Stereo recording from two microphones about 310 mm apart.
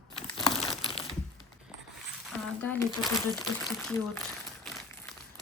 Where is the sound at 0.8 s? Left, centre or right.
Centre.